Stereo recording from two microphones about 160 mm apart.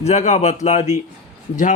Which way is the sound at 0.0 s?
40° left (ahead or behind).